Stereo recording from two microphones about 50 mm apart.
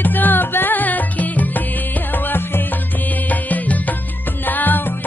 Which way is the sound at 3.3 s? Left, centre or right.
Left.